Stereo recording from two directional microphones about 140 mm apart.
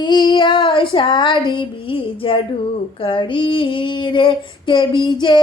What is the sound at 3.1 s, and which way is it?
Female singing, 35° left (ahead or behind).